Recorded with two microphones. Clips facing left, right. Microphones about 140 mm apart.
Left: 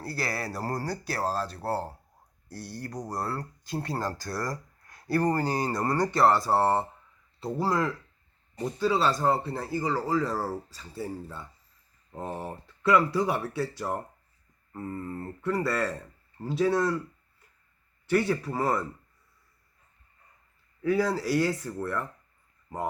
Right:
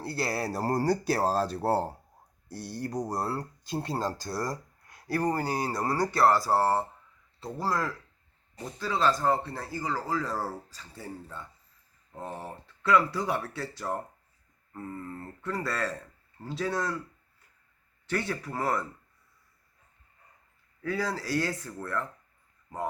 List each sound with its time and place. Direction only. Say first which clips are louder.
0.2 s speech: right 3 dB; 25° right (ahead or behind)
4.5 s speech: even; 10° right (ahead or behind)
12.2 s speech: left 3 dB; 15° left (ahead or behind)
12.5 s speech: left 1 dB; 5° left (ahead or behind)
18.1 s speech: left 6 dB; 5° left (ahead or behind)
20.8 s speech: left 6 dB; 10° left (ahead or behind)